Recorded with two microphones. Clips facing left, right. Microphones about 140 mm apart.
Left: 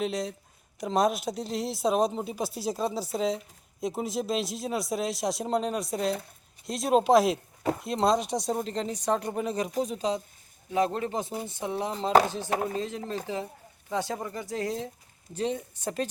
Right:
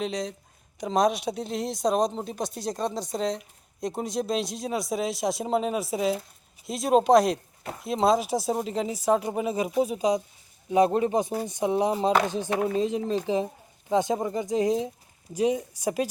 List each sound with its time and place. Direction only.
0.0 s speech: centre (ahead or behind)